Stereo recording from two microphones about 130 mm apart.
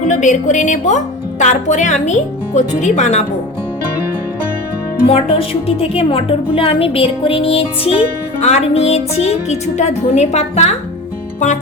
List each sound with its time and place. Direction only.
0.1 s speech: 70° left (ahead or behind)
5.0 s music: 50° left (ahead or behind)